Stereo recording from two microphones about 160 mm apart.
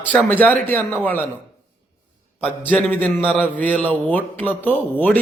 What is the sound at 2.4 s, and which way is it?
A man's voice, 10° left (ahead or behind).